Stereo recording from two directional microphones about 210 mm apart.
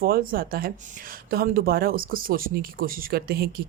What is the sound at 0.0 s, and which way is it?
Speech, 45° right (ahead or behind).